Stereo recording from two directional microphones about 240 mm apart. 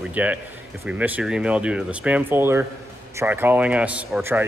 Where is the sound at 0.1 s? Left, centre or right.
Centre.